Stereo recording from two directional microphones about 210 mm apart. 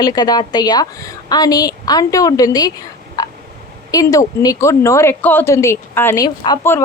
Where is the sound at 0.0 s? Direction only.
20° left (ahead or behind).